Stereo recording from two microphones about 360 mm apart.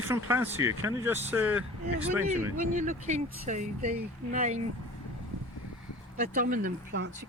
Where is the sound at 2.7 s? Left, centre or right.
Right.